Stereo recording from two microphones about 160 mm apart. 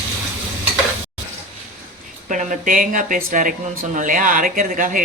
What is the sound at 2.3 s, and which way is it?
Speech, 55° right (ahead or behind).